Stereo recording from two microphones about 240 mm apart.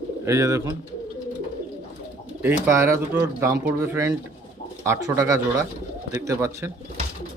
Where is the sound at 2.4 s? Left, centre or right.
Centre.